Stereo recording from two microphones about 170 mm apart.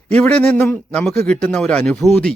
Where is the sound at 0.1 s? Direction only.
10° left (ahead or behind).